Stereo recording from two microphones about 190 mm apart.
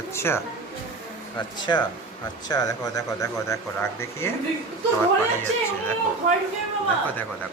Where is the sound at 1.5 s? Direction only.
25° left (ahead or behind).